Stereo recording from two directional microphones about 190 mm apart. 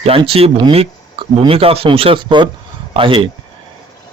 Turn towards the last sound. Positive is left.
turn(degrees=-25)  # may be behind; listen again after turning